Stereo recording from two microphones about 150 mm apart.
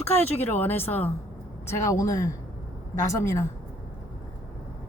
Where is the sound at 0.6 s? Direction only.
15° left (ahead or behind).